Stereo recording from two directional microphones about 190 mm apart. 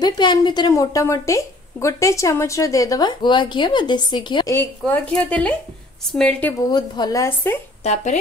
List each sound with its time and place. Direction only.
0.0 s a woman's voice: 20° left (ahead or behind)
4.6 s a woman's voice: 10° left (ahead or behind)
6.6 s speech: 20° left (ahead or behind)
7.8 s speech: 35° left (ahead or behind)